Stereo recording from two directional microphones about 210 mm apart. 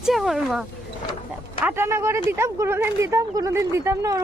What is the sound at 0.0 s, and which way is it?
Speech, centre (ahead or behind).